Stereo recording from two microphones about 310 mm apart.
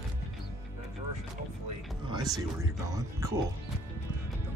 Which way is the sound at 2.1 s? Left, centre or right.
Centre.